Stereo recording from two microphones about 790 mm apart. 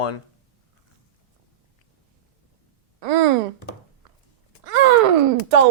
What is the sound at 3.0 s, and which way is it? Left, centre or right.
Speech, right.